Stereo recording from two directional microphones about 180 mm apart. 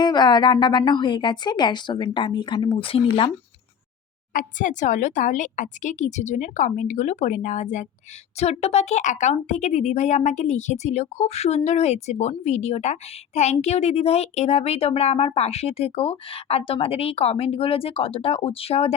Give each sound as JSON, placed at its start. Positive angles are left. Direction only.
{"t": 0.0, "sound": "a woman's voice", "side_deg": 25}
{"t": 4.4, "sound": "a woman's voice", "side_deg": 45}